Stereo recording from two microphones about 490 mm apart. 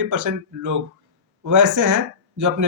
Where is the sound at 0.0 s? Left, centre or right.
Right.